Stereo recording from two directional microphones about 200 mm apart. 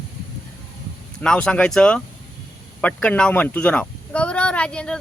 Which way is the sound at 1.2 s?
5° left (ahead or behind).